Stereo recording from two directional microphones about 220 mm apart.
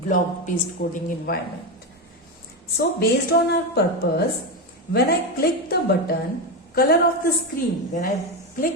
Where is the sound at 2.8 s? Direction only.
45° left (ahead or behind).